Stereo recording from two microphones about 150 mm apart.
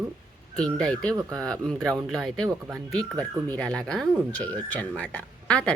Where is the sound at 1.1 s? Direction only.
25° right (ahead or behind).